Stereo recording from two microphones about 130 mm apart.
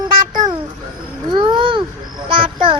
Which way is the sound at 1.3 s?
40° right (ahead or behind).